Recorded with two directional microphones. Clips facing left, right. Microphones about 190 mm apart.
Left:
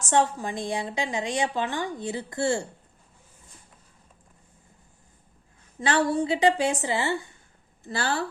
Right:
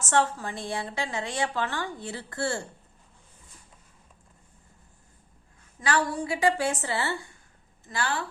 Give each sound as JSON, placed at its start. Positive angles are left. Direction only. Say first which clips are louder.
{"t": 0.0, "sound": "a woman's voice", "louder": "left 2 dB", "side_deg": 15}
{"t": 5.8, "sound": "a woman's voice", "louder": "left 4 dB", "side_deg": 25}
{"t": 7.9, "sound": "speech", "louder": "left 2 dB", "side_deg": 30}